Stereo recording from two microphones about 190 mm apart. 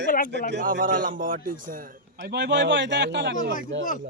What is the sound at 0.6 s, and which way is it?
A man's voice, 45° right (ahead or behind).